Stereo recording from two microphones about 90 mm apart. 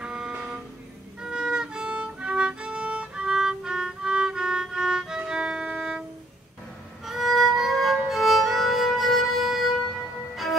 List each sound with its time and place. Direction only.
0.0 s vehicle: 10° right (ahead or behind)
1.2 s violin: 10° right (ahead or behind)
7.1 s violin: centre (ahead or behind)
10.3 s music: centre (ahead or behind)